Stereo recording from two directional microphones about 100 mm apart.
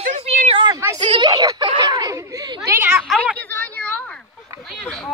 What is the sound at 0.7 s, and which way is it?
Speech, 30° right (ahead or behind).